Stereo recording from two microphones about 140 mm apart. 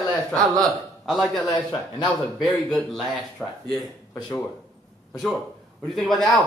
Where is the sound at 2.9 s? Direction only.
Centre (ahead or behind).